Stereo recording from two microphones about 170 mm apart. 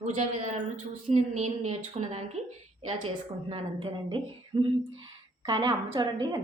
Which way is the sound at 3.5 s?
35° right (ahead or behind).